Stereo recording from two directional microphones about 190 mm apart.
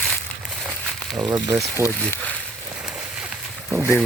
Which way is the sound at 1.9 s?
5° left (ahead or behind).